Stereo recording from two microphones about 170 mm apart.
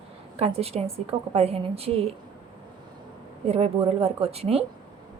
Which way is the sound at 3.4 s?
35° right (ahead or behind).